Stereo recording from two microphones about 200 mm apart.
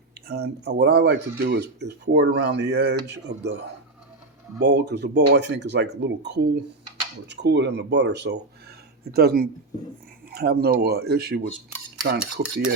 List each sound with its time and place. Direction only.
0.3 s speech: 50° right (ahead or behind)
4.6 s speech: 55° right (ahead or behind)